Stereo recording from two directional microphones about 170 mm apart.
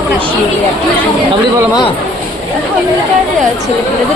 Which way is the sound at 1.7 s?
25° left (ahead or behind).